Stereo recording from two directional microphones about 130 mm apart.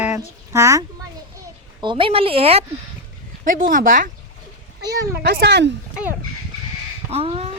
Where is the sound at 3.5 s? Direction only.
90° right.